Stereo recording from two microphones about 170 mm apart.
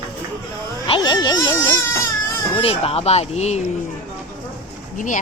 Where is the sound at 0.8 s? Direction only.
30° left (ahead or behind).